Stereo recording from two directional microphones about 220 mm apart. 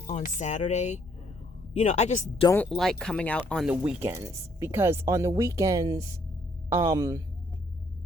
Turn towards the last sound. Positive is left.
turn(degrees=-15)  # may be behind; listen again after turning